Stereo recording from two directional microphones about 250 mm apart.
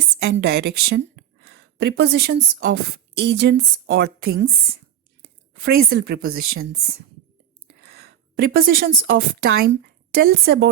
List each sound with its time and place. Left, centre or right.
0.3 s a woman's voice: right
7.7 s a sound: right
9.0 s speech: right